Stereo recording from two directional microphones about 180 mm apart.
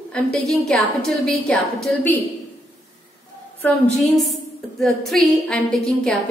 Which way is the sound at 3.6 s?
5° left (ahead or behind).